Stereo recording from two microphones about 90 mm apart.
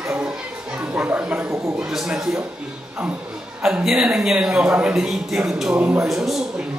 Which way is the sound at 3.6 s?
10° right (ahead or behind).